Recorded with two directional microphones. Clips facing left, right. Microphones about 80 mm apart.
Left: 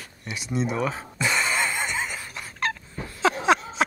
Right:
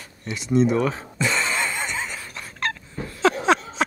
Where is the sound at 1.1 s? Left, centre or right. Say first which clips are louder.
Left 1 dB; centre.